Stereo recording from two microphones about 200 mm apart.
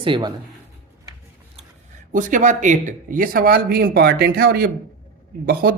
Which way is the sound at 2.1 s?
40° right (ahead or behind).